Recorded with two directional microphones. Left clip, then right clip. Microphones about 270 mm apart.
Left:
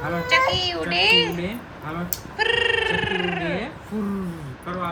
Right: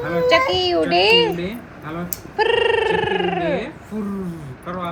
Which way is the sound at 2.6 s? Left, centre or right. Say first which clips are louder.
Right 4 dB; left.